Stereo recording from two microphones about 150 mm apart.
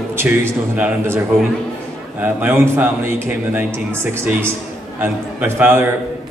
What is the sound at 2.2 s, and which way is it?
Speech, 15° right (ahead or behind).